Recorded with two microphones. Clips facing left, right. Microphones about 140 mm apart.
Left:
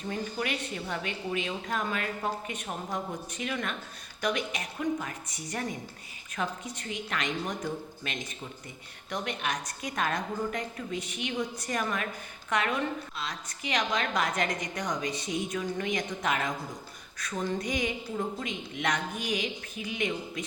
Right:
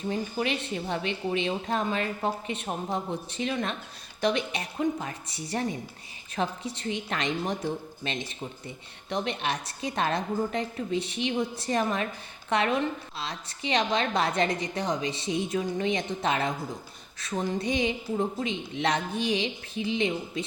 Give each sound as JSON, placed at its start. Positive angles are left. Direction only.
{"t": 0.1, "sound": "a woman's voice", "side_deg": -20}